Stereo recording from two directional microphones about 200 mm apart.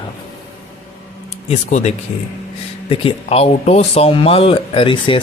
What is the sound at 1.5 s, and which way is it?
Speech, 35° left (ahead or behind).